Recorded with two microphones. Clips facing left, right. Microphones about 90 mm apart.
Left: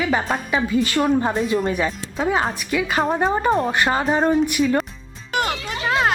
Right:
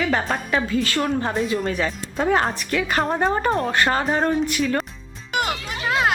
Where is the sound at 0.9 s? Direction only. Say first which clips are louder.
Left 5 dB; 5° left (ahead or behind).